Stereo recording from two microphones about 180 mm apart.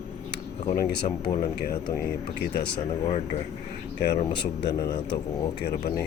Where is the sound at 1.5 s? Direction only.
55° left (ahead or behind).